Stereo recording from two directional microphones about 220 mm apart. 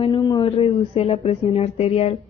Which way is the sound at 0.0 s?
20° left (ahead or behind).